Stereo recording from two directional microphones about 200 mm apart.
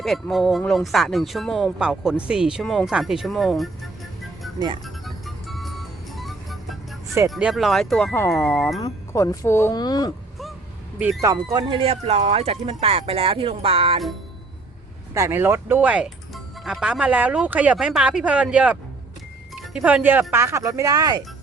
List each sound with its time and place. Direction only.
0.0 s speech: centre (ahead or behind)
5.0 s music: centre (ahead or behind)
7.3 s speech: 5° right (ahead or behind); by 10.1 s 20° left (ahead or behind)
11.5 s speech: 25° right (ahead or behind)
15.1 s speech: 15° right (ahead or behind)